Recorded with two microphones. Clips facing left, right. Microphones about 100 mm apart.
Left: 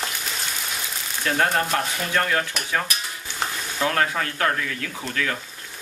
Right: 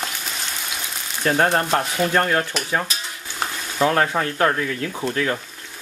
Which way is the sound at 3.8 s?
30° right (ahead or behind).